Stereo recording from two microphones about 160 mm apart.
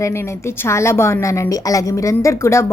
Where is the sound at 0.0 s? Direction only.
15° left (ahead or behind).